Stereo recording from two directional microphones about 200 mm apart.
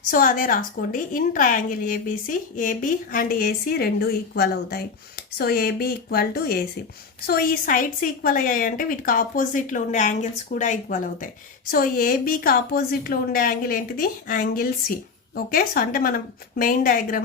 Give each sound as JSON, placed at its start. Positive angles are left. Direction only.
{"t": 0.1, "sound": "a woman's voice", "side_deg": 45}